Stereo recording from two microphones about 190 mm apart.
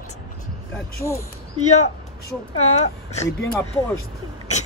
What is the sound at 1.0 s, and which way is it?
Speech, 15° left (ahead or behind).